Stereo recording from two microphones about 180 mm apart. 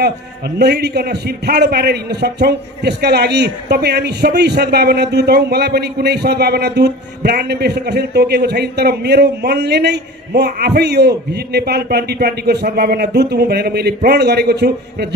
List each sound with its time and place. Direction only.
0.6 s a man's voice: 65° right (ahead or behind)